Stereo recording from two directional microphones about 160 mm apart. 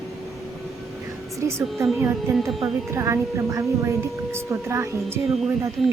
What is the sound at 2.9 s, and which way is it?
Speech, 20° right (ahead or behind).